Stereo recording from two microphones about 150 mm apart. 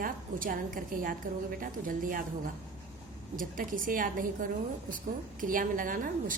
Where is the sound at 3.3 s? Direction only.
65° right (ahead or behind).